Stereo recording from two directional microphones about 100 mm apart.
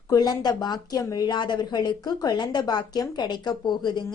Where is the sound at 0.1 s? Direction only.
40° left (ahead or behind).